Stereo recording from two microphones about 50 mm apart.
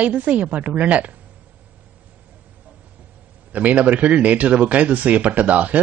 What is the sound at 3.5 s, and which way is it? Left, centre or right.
Speech, right.